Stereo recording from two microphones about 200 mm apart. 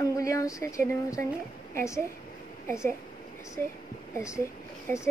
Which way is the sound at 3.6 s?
10° left (ahead or behind).